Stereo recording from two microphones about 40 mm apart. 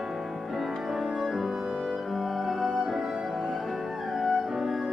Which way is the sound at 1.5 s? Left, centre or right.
Right.